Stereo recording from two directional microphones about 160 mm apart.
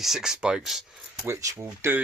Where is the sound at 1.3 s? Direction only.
20° right (ahead or behind).